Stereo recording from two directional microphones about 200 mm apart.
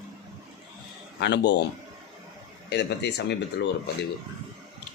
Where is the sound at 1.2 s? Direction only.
60° left (ahead or behind).